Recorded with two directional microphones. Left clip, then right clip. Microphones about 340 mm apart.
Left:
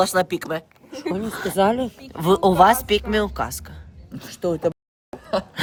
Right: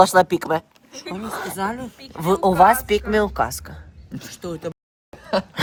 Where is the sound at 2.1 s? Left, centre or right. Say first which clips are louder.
Left 1 dB; centre.